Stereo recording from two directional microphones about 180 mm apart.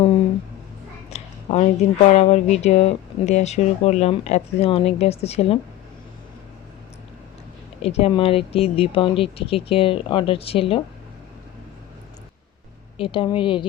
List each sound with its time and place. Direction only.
1.1 s speech: 40° left (ahead or behind)
7.8 s speech: 35° left (ahead or behind)
13.0 s speech: 30° left (ahead or behind)